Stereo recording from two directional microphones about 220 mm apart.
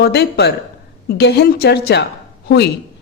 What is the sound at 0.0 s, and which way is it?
A woman's voice, 50° left (ahead or behind).